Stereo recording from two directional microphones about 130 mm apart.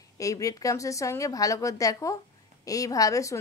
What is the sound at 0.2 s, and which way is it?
Speech, 25° left (ahead or behind).